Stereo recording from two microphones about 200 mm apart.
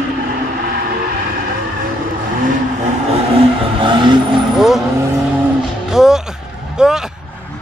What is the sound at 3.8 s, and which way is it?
Vehicle, 25° right (ahead or behind).